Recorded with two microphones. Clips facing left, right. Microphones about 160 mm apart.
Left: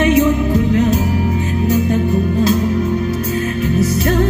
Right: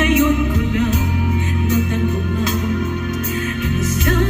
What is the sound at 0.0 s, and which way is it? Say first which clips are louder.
Music: left 3 dB; 35° left (ahead or behind).